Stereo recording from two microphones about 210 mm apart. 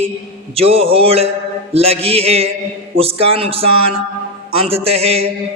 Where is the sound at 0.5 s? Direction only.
30° right (ahead or behind).